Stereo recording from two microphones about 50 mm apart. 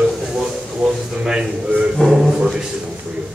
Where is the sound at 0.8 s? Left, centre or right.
Centre.